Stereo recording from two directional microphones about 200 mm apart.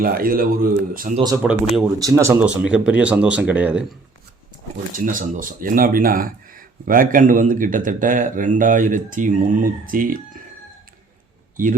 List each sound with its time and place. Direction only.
0.0 s speech: 45° right (ahead or behind)
1.1 s speech: 20° right (ahead or behind)
1.4 s speech: 5° right (ahead or behind)
2.0 s speech: 15° right (ahead or behind)
4.9 s a man's voice: 40° right (ahead or behind)
11.5 s speech: 40° right (ahead or behind)